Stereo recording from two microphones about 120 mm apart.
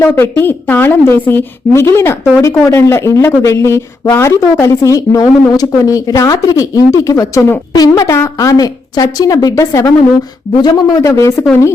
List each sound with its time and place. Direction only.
0.0 s a woman's voice: 20° left (ahead or behind)